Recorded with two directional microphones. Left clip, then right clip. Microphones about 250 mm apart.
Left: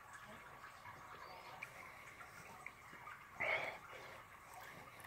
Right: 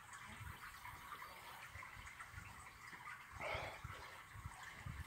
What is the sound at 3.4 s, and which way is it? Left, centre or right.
Dog, centre.